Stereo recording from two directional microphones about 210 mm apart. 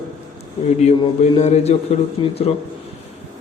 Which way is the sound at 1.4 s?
30° left (ahead or behind).